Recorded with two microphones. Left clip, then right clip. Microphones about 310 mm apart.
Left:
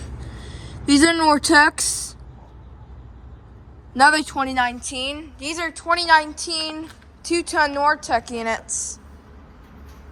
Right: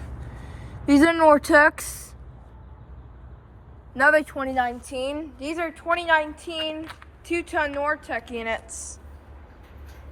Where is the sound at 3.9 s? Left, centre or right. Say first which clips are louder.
Left 3 dB; centre.